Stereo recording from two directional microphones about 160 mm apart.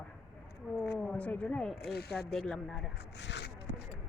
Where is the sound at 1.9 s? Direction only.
80° left.